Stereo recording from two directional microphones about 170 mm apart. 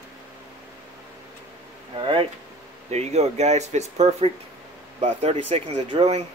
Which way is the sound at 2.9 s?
40° right (ahead or behind).